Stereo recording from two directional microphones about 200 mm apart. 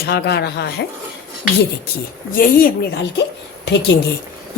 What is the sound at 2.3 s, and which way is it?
A woman's voice, 45° left (ahead or behind).